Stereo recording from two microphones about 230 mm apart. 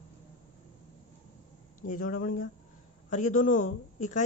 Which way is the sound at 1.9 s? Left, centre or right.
Left.